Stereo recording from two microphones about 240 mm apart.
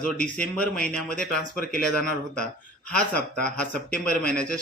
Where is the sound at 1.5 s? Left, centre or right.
Left.